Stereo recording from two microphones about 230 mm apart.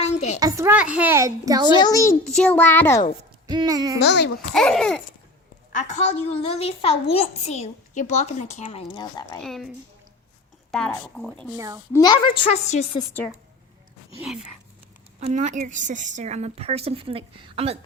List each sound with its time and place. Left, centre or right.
0.0 s a sound: left
0.3 s a child's voice: centre
1.7 s a child's voice: centre
2.2 s a child's voice: centre
3.4 s a child's voice: centre
4.0 s a child's voice: left
4.5 s speech: centre
5.7 s a child's voice: left
9.4 s speech: centre
10.7 s speech: centre
11.5 s a child's voice: centre
11.9 s a child's voice: centre
14.2 s speech: centre
15.2 s a woman's voice: right